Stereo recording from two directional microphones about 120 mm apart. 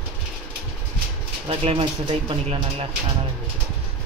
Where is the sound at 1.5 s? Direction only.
50° right (ahead or behind).